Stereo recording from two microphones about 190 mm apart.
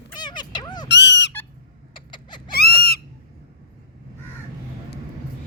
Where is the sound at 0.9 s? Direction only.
65° left (ahead or behind).